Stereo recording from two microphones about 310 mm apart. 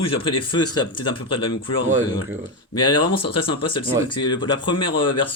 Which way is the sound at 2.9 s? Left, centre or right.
Left.